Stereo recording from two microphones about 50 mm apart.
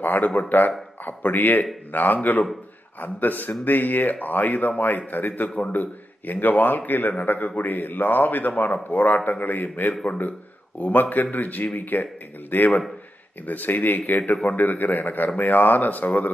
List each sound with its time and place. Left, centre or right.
0.0 s speech: left